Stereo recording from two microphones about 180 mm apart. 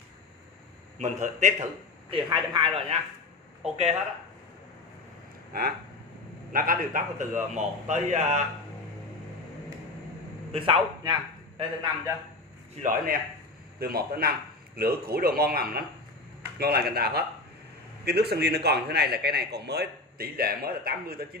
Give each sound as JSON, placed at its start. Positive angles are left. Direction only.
{"t": 0.9, "sound": "a man's voice", "side_deg": -40}
{"t": 6.5, "sound": "a man's voice", "side_deg": -50}
{"t": 10.5, "sound": "a man's voice", "side_deg": -30}
{"t": 12.7, "sound": "a man's voice", "side_deg": -50}